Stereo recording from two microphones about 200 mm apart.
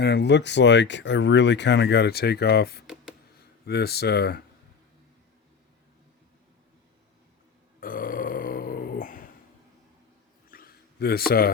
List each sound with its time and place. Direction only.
0.0 s speech: 55° left (ahead or behind)
2.8 s a sound: centre (ahead or behind)
3.7 s speech: 55° left (ahead or behind)
7.8 s burping: 45° left (ahead or behind)
10.5 s a sound: 50° left (ahead or behind)
11.3 s speech: 50° left (ahead or behind)